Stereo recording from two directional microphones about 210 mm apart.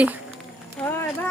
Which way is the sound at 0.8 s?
10° left (ahead or behind).